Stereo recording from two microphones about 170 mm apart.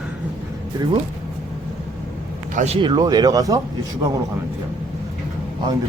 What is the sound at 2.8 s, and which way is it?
Speech, 25° right (ahead or behind).